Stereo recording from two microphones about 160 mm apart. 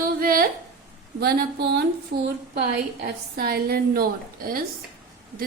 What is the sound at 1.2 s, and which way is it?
Speech, 90° right.